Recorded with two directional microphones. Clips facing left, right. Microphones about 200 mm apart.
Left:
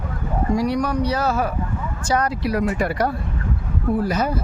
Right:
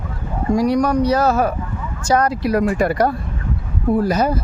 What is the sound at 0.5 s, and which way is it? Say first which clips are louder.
Speech: right 6 dB; 45° right (ahead or behind).